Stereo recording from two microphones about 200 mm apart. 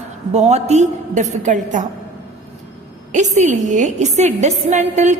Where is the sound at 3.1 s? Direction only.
35° right (ahead or behind).